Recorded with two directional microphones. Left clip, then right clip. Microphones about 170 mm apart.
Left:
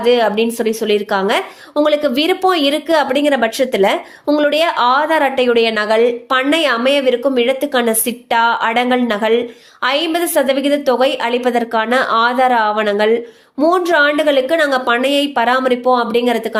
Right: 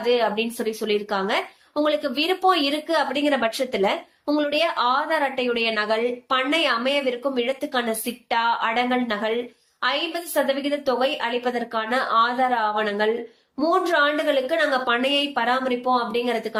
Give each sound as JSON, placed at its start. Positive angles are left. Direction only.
{"t": 0.0, "sound": "speech", "side_deg": 50}